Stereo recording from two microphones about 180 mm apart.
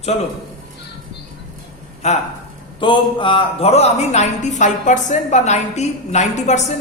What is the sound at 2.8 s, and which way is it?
A woman's voice, 25° left (ahead or behind).